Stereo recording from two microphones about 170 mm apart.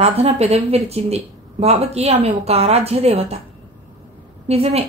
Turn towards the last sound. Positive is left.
turn(degrees=-35)  # may be behind; listen again after turning